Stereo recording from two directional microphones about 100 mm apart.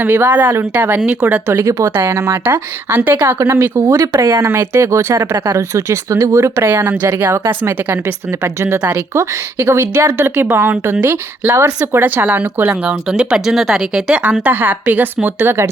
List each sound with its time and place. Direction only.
0.0 s speech: 20° right (ahead or behind)
1.5 s speech: 30° right (ahead or behind)
3.9 s speech: 35° right (ahead or behind)
10.2 s speech: 20° right (ahead or behind)